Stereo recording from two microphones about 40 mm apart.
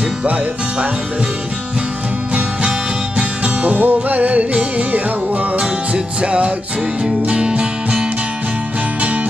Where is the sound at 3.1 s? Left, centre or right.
Right.